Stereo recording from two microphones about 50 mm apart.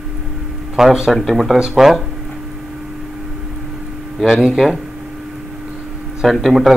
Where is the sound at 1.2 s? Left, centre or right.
Centre.